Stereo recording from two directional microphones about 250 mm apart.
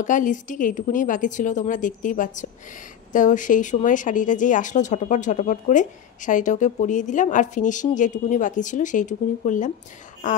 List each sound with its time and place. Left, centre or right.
0.0 s speech: left